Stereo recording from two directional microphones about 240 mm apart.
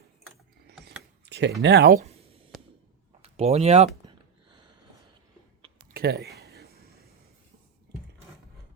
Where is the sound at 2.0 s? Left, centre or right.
Right.